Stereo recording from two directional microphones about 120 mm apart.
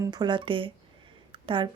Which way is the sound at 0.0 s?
35° right (ahead or behind).